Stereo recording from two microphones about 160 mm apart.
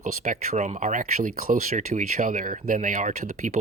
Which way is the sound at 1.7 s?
50° right (ahead or behind).